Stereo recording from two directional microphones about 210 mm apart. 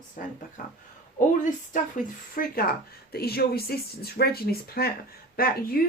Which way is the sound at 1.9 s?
45° left (ahead or behind).